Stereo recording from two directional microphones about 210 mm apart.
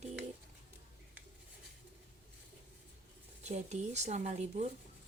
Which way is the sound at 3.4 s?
35° right (ahead or behind).